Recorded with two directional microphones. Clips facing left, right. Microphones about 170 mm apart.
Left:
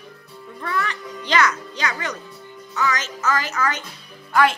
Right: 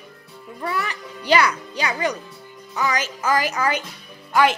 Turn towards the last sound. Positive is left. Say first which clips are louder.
# even
turn(degrees=0)  # may be behind; listen again after turning